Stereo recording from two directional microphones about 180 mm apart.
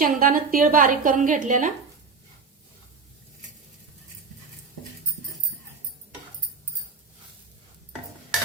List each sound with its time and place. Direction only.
0.0 s a woman's voice: 50° right (ahead or behind)